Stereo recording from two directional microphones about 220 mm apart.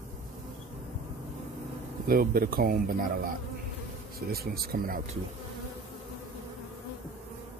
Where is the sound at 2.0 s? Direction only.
40° right (ahead or behind).